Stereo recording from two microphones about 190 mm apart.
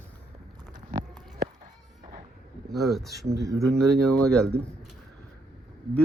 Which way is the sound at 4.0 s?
5° left (ahead or behind).